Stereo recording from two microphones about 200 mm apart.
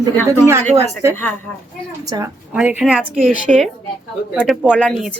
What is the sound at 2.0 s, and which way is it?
Speech, 15° right (ahead or behind).